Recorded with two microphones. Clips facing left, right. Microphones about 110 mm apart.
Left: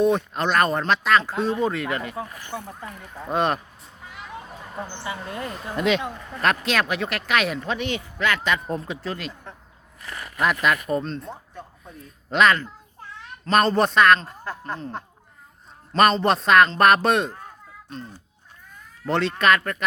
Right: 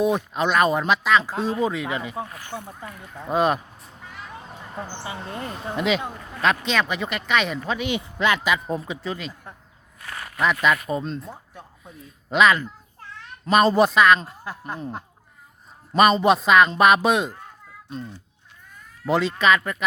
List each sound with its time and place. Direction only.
0.0 s speech: 5° right (ahead or behind)
2.5 s speech: 20° left (ahead or behind)
3.2 s speech: 5° right (ahead or behind)
5.0 s speech: 30° right (ahead or behind)
5.7 s speech: 5° right (ahead or behind)
8.4 s speech: 5° right (ahead or behind)
19.0 s speech: 5° right (ahead or behind)